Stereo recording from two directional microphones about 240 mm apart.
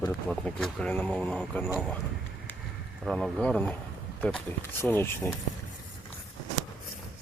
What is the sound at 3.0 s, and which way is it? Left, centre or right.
Speech, centre.